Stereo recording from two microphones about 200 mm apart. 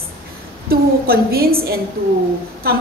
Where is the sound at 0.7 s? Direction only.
50° right (ahead or behind).